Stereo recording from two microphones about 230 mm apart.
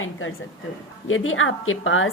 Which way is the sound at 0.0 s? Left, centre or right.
Left.